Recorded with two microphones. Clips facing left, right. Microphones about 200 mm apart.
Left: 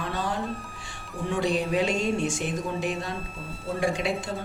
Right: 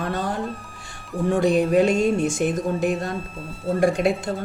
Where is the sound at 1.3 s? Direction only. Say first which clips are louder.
Right 7 dB; 50° right (ahead or behind).